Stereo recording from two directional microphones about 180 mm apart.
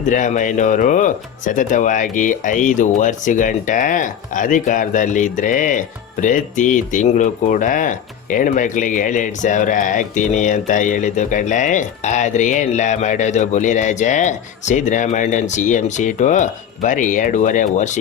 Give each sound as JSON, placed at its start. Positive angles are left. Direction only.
{"t": 0.1, "sound": "speech", "side_deg": 45}